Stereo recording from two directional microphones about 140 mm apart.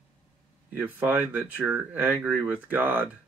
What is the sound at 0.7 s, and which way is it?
Speech, 15° right (ahead or behind).